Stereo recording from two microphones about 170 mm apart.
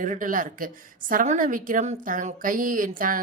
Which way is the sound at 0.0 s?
50° right (ahead or behind).